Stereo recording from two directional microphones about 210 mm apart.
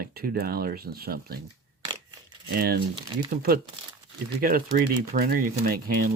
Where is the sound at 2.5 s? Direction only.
45° right (ahead or behind).